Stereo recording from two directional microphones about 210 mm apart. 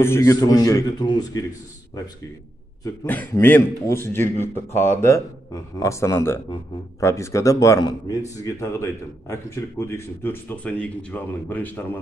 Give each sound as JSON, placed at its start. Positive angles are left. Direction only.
{"t": 0.0, "sound": "a man's voice", "side_deg": 15}
{"t": 2.8, "sound": "a man's voice", "side_deg": 10}